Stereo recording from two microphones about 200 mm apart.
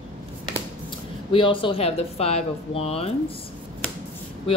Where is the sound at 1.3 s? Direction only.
25° left (ahead or behind).